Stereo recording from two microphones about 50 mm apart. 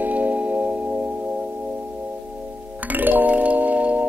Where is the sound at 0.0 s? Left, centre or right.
Right.